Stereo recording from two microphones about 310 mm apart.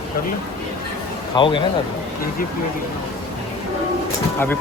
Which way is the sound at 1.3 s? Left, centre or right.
Centre.